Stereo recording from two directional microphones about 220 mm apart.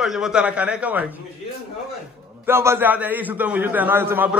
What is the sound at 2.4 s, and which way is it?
A man's voice, 10° right (ahead or behind).